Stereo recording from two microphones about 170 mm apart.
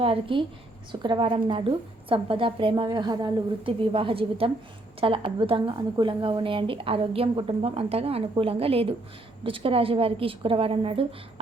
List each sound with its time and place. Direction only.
0.0 s a woman's voice: 30° right (ahead or behind)